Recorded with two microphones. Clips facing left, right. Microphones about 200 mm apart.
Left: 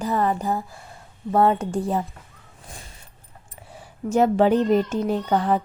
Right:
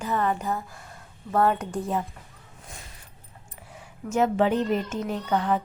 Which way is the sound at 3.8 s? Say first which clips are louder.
Left 4 dB; 35° left (ahead or behind).